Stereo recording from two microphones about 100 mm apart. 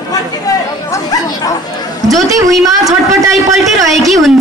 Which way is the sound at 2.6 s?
35° right (ahead or behind).